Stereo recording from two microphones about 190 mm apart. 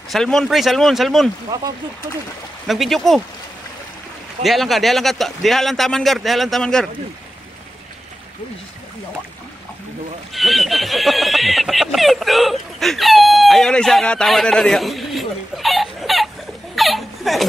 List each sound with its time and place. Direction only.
0.1 s speech: centre (ahead or behind)
1.5 s speech: 20° right (ahead or behind)
2.6 s speech: centre (ahead or behind)
4.4 s speech: centre (ahead or behind)
10.3 s speech: centre (ahead or behind)
16.7 s laughter: centre (ahead or behind)